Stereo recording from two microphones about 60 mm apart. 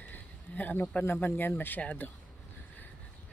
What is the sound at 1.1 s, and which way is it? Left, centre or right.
Speech, left.